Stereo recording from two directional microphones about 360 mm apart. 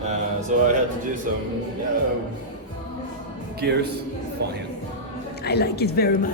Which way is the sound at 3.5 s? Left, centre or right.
Right.